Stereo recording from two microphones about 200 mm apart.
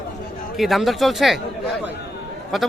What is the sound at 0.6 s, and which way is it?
Speech, centre (ahead or behind).